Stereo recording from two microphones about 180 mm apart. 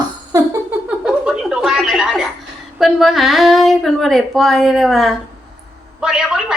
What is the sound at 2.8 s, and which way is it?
Speech, centre (ahead or behind).